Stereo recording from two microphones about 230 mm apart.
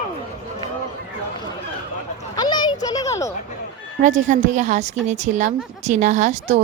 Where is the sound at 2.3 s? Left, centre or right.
Centre.